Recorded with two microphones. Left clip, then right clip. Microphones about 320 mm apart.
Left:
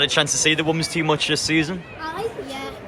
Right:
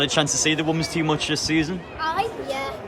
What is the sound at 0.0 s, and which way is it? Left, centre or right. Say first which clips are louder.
Speech: left 2 dB; centre.